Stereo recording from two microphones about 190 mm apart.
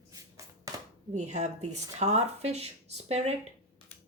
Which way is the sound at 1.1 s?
40° right (ahead or behind).